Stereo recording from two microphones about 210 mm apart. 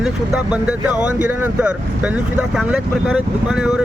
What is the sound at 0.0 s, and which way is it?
Speech, 5° right (ahead or behind).